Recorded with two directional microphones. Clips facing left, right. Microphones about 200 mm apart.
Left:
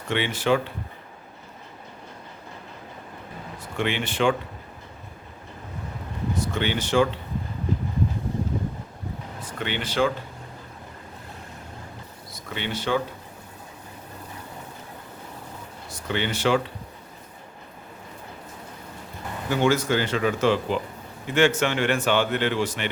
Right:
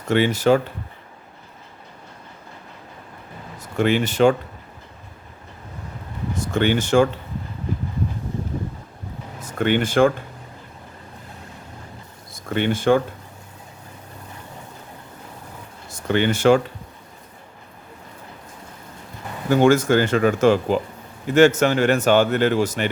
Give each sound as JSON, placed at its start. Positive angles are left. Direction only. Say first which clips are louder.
{"t": 0.1, "sound": "a man's voice", "louder": "right 6 dB", "side_deg": -40}
{"t": 3.6, "sound": "speech", "louder": "right 8 dB", "side_deg": -40}
{"t": 6.5, "sound": "a man's voice", "louder": "right 8 dB", "side_deg": -50}
{"t": 9.4, "sound": "speech", "louder": "right 11 dB", "side_deg": -45}
{"t": 12.3, "sound": "speech", "louder": "right 9 dB", "side_deg": -50}
{"t": 16.0, "sound": "a man's voice", "louder": "right 8 dB", "side_deg": -50}
{"t": 19.5, "sound": "a man's voice", "louder": "right 6 dB", "side_deg": -50}